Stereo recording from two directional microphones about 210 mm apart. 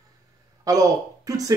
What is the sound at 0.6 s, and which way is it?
Speech, 15° right (ahead or behind).